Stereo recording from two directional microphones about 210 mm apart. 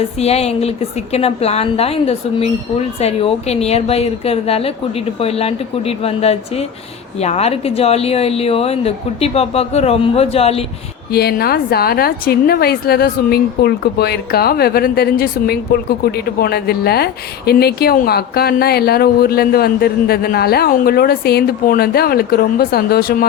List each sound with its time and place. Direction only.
0.2 s a woman's voice: 30° left (ahead or behind)
11.1 s a woman's voice: 50° left (ahead or behind)